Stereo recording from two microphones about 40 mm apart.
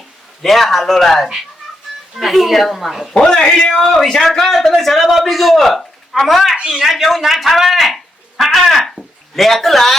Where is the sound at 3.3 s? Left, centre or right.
Centre.